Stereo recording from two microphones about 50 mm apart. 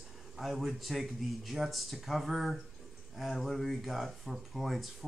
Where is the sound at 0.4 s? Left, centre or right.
Centre.